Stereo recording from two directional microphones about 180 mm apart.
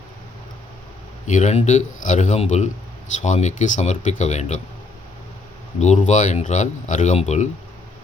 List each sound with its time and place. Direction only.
1.3 s speech: 40° left (ahead or behind)
5.8 s speech: 40° left (ahead or behind)